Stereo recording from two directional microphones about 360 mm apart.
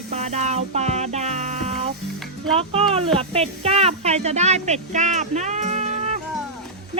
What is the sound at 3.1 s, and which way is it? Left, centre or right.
Speech, centre.